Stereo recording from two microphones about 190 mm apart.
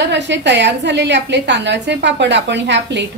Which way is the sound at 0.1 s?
65° right (ahead or behind).